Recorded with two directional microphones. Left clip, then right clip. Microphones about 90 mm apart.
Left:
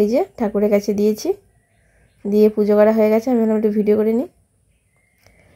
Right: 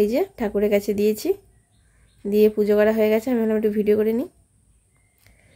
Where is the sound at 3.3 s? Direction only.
30° left (ahead or behind).